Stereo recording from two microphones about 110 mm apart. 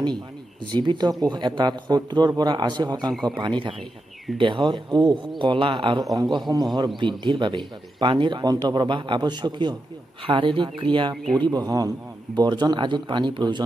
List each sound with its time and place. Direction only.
0.7 s speech: 40° right (ahead or behind)